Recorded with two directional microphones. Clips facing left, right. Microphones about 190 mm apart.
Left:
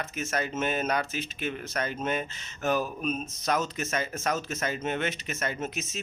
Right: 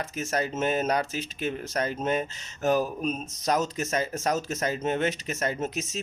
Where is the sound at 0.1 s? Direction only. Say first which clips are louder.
Right 2 dB; 35° right (ahead or behind).